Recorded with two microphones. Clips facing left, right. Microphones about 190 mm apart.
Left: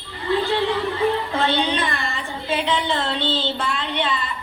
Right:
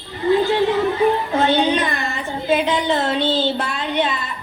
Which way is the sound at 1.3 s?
45° right (ahead or behind).